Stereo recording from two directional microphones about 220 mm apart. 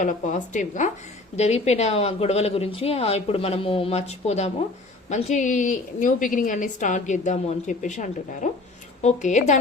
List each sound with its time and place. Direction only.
0.0 s a woman's voice: 35° left (ahead or behind)